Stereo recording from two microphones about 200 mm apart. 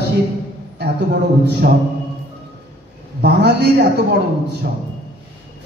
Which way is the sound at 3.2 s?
55° right (ahead or behind).